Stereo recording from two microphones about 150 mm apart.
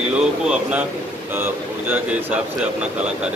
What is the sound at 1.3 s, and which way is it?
Speech, 15° right (ahead or behind).